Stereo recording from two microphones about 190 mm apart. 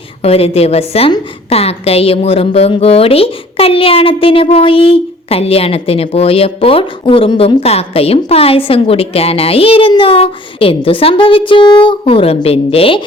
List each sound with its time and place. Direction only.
0.2 s a woman's voice: 30° left (ahead or behind)